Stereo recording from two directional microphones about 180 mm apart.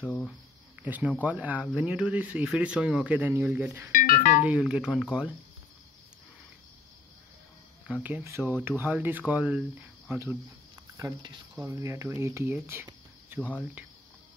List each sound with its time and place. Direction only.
0.0 s speech: 10° left (ahead or behind)
0.8 s speech: 10° right (ahead or behind)
3.9 s music: 50° left (ahead or behind)
4.4 s speech: 5° right (ahead or behind)
7.9 s speech: 10° right (ahead or behind)
13.4 s speech: 10° left (ahead or behind)